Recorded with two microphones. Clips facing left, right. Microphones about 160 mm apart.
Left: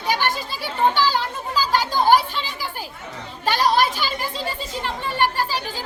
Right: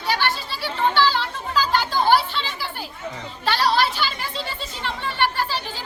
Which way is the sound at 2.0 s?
45° left (ahead or behind).